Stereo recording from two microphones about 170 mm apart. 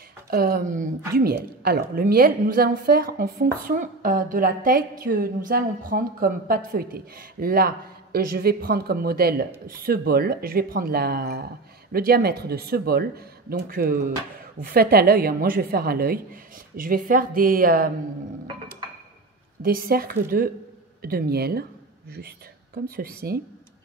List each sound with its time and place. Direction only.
0.3 s a woman's voice: 60° right (ahead or behind)
19.6 s a woman's voice: 60° right (ahead or behind)
22.8 s a woman's voice: 60° right (ahead or behind)